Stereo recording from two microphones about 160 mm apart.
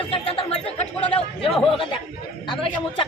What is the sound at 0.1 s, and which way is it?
Chatter, 35° left (ahead or behind).